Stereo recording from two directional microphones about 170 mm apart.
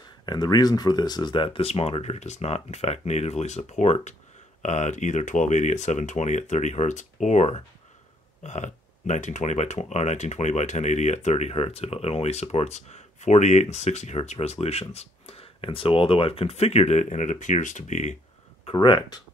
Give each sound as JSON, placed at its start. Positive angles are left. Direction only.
{"t": 0.2, "sound": "speech", "side_deg": 25}
{"t": 18.7, "sound": "speech", "side_deg": 30}